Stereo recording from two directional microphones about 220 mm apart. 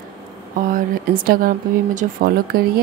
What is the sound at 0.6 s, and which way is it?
Speech, 40° right (ahead or behind).